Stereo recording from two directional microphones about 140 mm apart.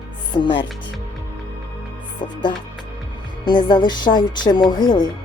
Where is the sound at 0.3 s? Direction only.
35° left (ahead or behind).